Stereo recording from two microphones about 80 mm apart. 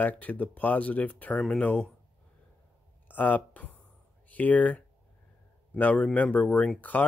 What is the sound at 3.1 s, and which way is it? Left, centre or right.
A man's voice, left.